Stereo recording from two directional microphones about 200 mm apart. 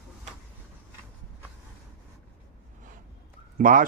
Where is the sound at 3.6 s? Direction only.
45° right (ahead or behind).